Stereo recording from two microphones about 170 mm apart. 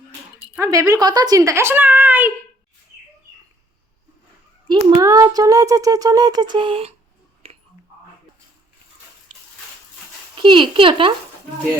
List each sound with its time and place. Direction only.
0.6 s a woman's voice: 20° right (ahead or behind)
4.7 s speech: 25° right (ahead or behind)
10.4 s speech: 30° right (ahead or behind)